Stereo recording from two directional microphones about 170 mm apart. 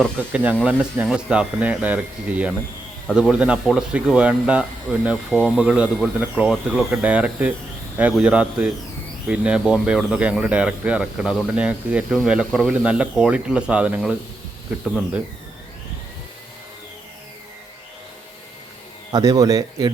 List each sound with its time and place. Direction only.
0.2 s speech: 10° right (ahead or behind)
19.1 s speech: 20° right (ahead or behind)